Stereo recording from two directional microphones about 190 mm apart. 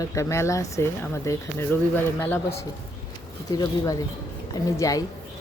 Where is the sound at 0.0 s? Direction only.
15° left (ahead or behind).